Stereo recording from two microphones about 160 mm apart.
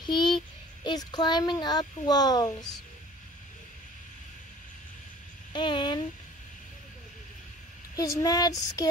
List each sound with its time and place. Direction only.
0.0 s child singing: 30° left (ahead or behind)
0.8 s speech: 25° left (ahead or behind)
5.5 s speech: 30° left (ahead or behind)
7.9 s speech: 20° left (ahead or behind)